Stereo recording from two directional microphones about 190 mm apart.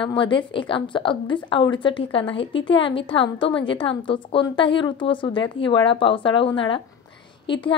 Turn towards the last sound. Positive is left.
turn(degrees=25)  # may be behind; listen again after turning